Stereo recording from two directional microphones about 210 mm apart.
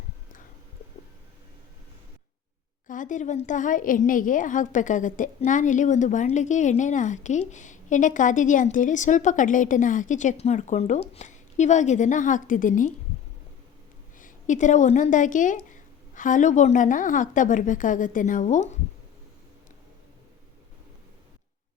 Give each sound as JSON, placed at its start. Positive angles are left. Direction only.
{"t": 2.8, "sound": "a woman's voice", "side_deg": 40}
{"t": 14.2, "sound": "a woman's voice", "side_deg": 40}